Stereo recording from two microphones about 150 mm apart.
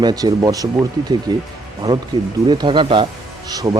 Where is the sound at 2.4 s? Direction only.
30° right (ahead or behind).